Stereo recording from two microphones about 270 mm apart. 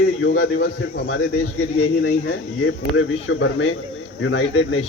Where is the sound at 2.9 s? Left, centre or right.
Left.